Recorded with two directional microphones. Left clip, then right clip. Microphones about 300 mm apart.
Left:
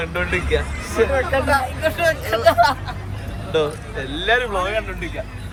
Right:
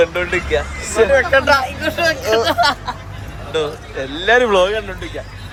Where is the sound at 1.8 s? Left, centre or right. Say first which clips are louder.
Right 2 dB; centre.